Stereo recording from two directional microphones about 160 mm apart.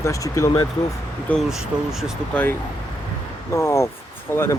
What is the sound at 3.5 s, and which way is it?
Speech, 20° left (ahead or behind).